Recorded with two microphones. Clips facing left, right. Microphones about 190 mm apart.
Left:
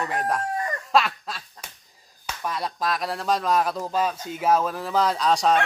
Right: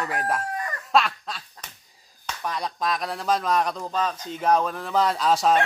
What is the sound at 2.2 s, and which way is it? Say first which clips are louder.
Speech: even; centre (ahead or behind).